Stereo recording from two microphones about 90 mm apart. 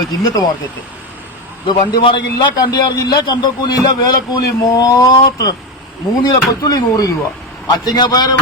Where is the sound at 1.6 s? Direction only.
60° left (ahead or behind).